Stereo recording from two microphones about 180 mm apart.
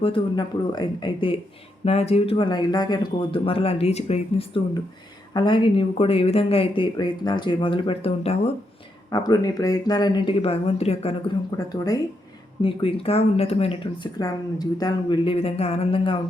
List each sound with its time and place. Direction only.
0.0 s speech: 25° left (ahead or behind)
9.0 s speech: 20° left (ahead or behind)
11.5 s speech: 20° left (ahead or behind)
12.6 s speech: 30° left (ahead or behind)